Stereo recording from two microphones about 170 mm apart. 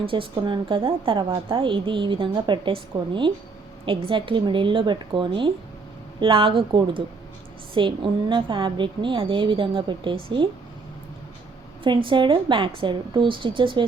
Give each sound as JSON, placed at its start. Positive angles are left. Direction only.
{"t": 0.0, "sound": "a woman's voice", "side_deg": -30}
{"t": 11.8, "sound": "a woman's voice", "side_deg": -30}